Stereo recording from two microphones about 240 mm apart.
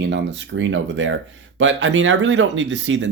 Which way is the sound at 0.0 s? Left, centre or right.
Right.